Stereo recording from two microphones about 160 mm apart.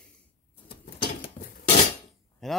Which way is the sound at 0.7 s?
30° left (ahead or behind).